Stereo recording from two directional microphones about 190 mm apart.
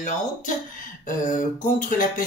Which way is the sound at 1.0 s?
45° left (ahead or behind).